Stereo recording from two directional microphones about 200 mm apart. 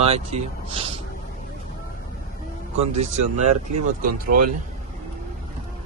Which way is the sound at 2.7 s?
30° right (ahead or behind).